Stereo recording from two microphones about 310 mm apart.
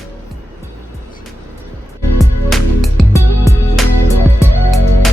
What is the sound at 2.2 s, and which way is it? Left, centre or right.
Music, centre.